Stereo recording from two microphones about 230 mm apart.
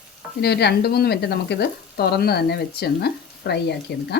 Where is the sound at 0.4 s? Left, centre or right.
Left.